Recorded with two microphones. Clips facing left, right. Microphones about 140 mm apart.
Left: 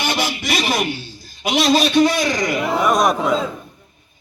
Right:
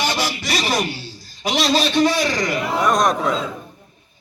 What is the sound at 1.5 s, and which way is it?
A man's voice, 15° left (ahead or behind).